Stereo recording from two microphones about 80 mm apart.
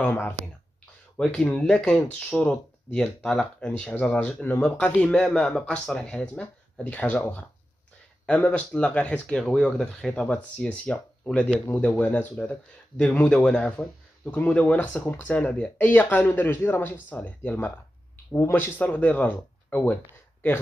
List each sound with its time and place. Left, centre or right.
0.0 s speech: left
1.1 s a man's voice: centre